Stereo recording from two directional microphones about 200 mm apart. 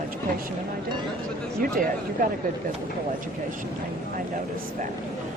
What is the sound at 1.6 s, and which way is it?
Speech, 45° right (ahead or behind).